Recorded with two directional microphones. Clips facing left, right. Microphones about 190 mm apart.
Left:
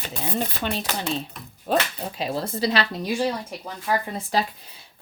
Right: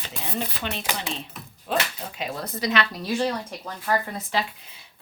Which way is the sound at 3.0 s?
10° left (ahead or behind).